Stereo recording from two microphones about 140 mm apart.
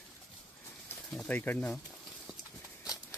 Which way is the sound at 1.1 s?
10° left (ahead or behind).